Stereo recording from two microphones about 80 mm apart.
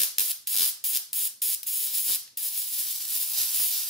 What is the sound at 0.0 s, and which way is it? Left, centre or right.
Music, centre.